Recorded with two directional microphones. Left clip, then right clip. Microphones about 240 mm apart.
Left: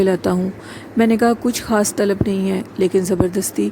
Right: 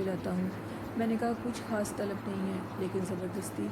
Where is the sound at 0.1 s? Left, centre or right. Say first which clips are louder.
Left 17 dB; left.